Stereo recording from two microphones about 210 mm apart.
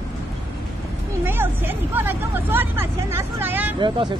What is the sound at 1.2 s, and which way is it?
Speech, 10° right (ahead or behind).